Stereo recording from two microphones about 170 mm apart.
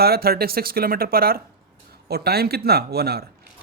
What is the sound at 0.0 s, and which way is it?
A man's voice, 65° right (ahead or behind).